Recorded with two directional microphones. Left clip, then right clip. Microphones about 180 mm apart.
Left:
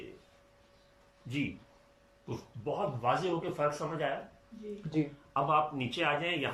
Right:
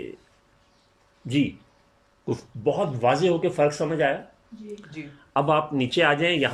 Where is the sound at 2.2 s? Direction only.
50° right (ahead or behind).